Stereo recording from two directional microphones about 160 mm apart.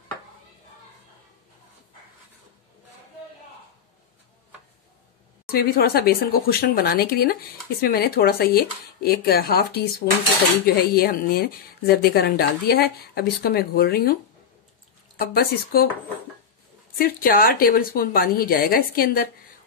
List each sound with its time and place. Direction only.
5.5 s speech: 70° left (ahead or behind)
15.1 s speech: 70° left (ahead or behind)
17.0 s a woman's voice: 65° left (ahead or behind)